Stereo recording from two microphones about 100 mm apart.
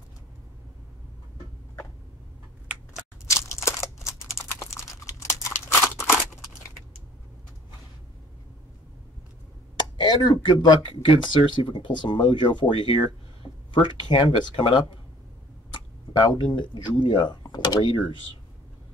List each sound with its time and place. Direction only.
2.9 s a sound: 30° left (ahead or behind)
10.0 s speech: 45° left (ahead or behind)
16.1 s speech: 45° left (ahead or behind)